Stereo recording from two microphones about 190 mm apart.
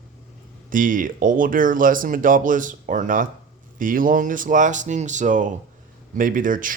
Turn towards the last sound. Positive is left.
turn(degrees=-45)  # may be behind; listen again after turning